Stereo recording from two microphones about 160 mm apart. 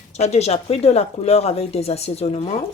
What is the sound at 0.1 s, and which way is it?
Speech, 45° left (ahead or behind).